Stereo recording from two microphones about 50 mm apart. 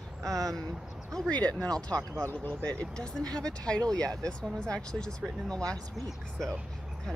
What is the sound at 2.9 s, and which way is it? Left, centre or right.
Speech, centre.